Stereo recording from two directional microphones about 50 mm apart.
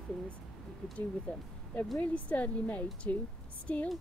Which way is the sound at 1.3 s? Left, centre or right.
Left.